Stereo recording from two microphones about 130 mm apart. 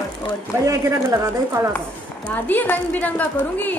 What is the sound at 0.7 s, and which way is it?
A woman's voice, 25° right (ahead or behind).